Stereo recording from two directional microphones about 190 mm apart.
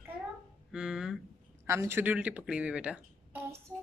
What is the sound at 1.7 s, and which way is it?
Speech, 15° right (ahead or behind).